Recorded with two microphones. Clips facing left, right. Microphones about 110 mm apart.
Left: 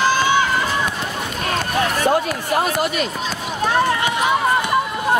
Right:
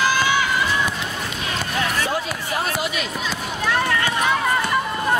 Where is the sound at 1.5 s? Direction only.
45° left (ahead or behind).